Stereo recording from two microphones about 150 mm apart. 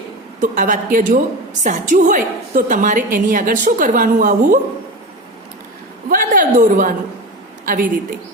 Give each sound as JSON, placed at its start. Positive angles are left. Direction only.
{"t": 0.4, "sound": "a woman's voice", "side_deg": -60}
{"t": 6.1, "sound": "a sound", "side_deg": -65}
{"t": 7.6, "sound": "a woman's voice", "side_deg": -65}